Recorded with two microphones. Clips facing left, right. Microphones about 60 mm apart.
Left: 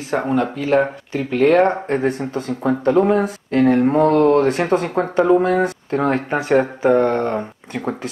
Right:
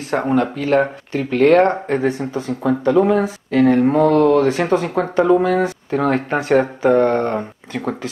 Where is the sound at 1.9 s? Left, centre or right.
Centre.